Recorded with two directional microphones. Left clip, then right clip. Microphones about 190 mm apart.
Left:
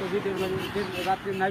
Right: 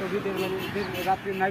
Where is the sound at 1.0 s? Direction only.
Centre (ahead or behind).